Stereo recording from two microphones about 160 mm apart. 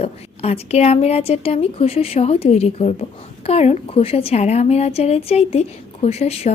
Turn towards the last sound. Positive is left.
turn(degrees=40)  # may be behind; listen again after turning